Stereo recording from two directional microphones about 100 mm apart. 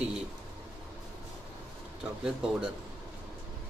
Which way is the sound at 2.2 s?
5° right (ahead or behind).